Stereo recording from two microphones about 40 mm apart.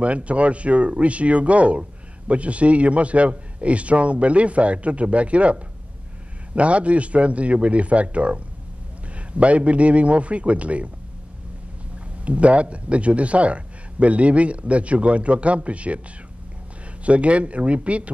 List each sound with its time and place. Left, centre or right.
0.0 s speech: right
12.3 s speech: right
17.0 s speech: right